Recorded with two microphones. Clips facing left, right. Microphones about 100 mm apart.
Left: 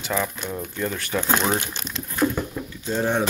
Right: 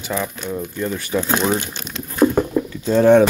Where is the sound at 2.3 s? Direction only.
80° right.